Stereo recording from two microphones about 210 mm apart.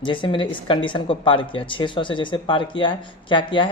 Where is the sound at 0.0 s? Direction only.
25° left (ahead or behind).